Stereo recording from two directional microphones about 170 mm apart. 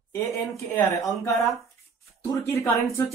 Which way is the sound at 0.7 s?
15° left (ahead or behind).